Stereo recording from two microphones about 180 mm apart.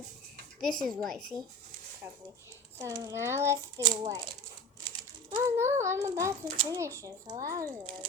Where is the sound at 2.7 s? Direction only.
20° right (ahead or behind).